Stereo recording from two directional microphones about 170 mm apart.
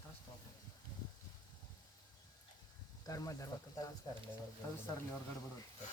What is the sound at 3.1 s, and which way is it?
Speech, 20° left (ahead or behind).